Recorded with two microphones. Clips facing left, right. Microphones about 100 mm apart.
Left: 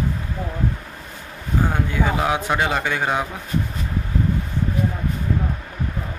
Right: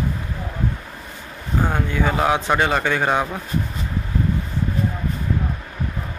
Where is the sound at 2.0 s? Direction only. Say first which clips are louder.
Right 2 dB; 5° left (ahead or behind).